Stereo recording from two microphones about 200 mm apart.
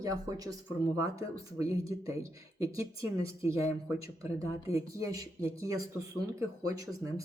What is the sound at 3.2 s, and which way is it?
Speech, 15° right (ahead or behind).